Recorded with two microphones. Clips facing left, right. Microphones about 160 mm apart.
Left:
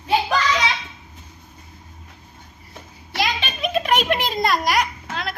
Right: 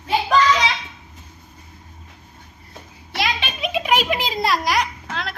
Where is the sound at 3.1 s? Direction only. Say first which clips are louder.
Even; centre (ahead or behind).